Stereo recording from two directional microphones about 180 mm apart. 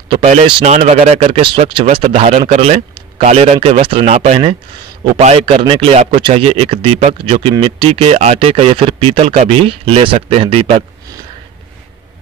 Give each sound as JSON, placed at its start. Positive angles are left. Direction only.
{"t": 0.1, "sound": "speech", "side_deg": -30}